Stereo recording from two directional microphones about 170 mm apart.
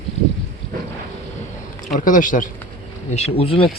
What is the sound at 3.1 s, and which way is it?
Speech, 35° left (ahead or behind).